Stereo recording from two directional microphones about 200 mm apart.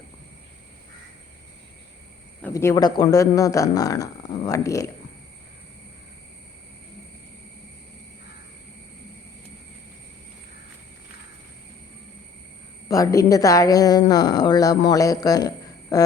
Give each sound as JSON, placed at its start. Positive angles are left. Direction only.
{"t": 2.4, "sound": "a woman's voice", "side_deg": 15}
{"t": 12.9, "sound": "a woman's voice", "side_deg": 15}